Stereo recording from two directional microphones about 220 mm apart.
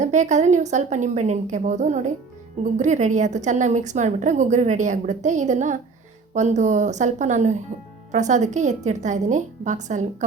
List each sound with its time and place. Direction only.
0.0 s a woman's voice: 35° right (ahead or behind)